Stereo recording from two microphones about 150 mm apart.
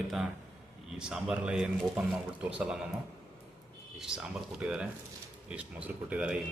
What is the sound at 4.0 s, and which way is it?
A man's voice, 5° right (ahead or behind).